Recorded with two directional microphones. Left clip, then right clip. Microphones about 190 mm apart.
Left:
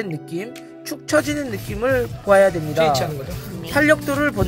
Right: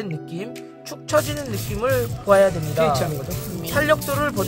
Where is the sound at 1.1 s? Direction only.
20° left (ahead or behind).